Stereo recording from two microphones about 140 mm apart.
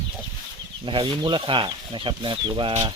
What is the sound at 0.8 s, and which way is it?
Speech, 35° right (ahead or behind).